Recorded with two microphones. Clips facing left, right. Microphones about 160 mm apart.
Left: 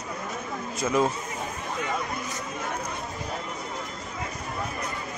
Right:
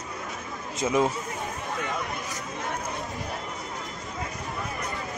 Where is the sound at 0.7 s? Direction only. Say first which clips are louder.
Even; 20° right (ahead or behind).